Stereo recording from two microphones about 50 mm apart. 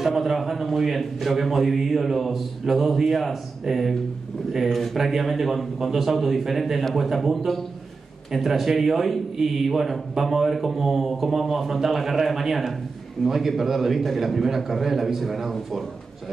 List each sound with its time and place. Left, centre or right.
0.0 s a man's voice: centre